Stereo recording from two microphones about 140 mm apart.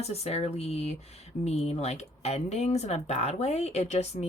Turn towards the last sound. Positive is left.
turn(degrees=50)  # may be behind; listen again after turning